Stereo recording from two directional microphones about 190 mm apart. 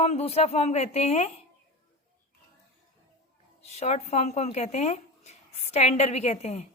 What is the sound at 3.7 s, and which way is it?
A woman's voice, 35° left (ahead or behind).